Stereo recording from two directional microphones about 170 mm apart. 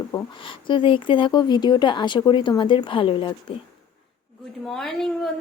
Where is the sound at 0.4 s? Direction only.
30° left (ahead or behind).